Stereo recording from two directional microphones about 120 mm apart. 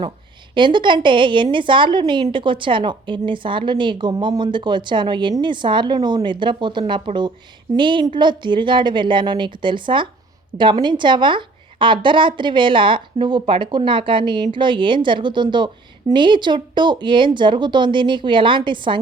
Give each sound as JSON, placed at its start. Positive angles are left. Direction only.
{"t": 0.5, "sound": "a woman's voice", "side_deg": -40}